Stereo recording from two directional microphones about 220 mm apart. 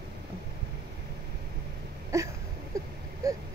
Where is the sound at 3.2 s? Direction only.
15° right (ahead or behind).